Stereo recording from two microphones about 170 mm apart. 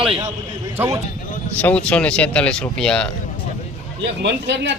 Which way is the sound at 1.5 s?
10° left (ahead or behind).